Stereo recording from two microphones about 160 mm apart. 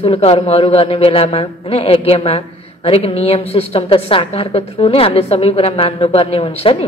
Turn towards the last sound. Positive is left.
turn(degrees=40)  # may be behind; listen again after turning